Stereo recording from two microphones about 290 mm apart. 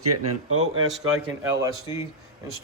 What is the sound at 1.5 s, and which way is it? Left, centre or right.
Speech, centre.